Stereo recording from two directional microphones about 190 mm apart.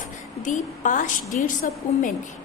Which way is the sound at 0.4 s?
40° left (ahead or behind).